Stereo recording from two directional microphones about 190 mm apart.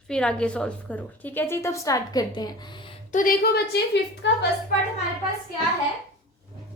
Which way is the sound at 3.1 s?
50° left (ahead or behind).